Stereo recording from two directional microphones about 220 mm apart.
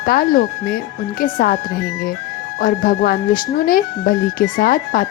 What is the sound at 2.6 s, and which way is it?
Speech, 40° left (ahead or behind).